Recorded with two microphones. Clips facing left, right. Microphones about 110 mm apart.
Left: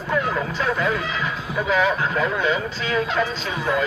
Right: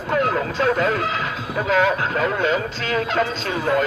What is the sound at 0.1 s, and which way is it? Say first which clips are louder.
Speech: right 3 dB; 70° right (ahead or behind).